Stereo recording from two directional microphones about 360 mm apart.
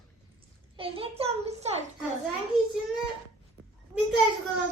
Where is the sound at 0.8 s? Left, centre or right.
Centre.